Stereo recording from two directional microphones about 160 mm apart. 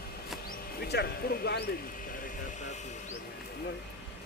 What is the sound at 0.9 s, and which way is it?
Speech, 90° left.